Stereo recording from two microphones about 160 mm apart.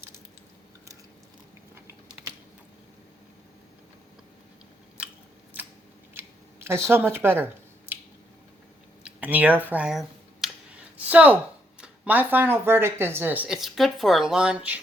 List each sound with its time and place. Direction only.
5.0 s scissors: 5° right (ahead or behind)
6.1 s chewing: 15° right (ahead or behind)
6.8 s speech: 15° right (ahead or behind)
9.0 s a sound: 10° right (ahead or behind)
11.8 s speech: 10° right (ahead or behind)